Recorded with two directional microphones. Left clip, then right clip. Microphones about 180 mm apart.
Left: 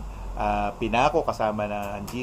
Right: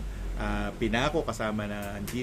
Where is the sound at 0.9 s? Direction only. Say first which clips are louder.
Left 8 dB; 20° right (ahead or behind).